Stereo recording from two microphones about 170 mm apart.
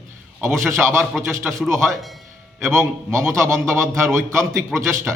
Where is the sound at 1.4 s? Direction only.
Centre (ahead or behind).